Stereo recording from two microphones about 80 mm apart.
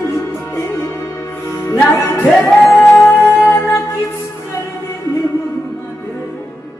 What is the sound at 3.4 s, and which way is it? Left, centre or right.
Music, left.